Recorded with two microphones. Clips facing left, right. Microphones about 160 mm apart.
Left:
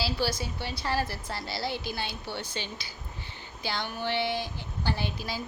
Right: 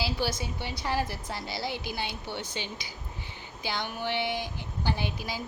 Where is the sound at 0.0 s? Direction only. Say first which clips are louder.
Left 1 dB; 20° right (ahead or behind).